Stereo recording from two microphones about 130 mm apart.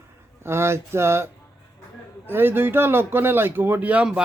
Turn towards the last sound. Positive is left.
turn(degrees=-10)  # may be behind; listen again after turning